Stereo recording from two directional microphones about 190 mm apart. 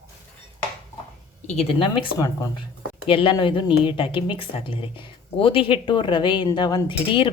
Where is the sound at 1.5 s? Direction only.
30° left (ahead or behind).